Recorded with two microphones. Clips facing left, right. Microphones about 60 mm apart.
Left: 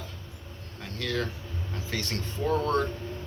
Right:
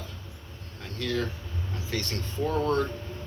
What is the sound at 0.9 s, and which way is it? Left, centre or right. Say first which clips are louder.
Speech: right 1 dB; left.